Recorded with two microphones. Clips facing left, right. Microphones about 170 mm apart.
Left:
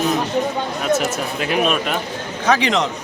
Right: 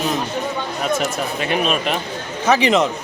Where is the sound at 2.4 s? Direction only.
15° right (ahead or behind).